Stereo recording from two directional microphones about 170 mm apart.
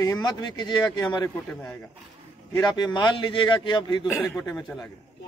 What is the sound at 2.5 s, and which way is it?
A man's voice, 25° left (ahead or behind).